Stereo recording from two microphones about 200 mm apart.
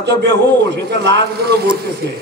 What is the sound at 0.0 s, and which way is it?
A man's voice, 55° right (ahead or behind).